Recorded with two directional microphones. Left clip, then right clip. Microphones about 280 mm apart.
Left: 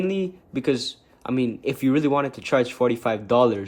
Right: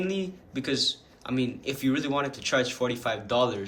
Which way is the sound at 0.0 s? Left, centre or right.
Centre.